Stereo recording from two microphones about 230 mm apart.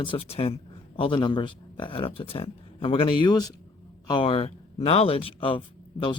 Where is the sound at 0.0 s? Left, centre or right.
Left.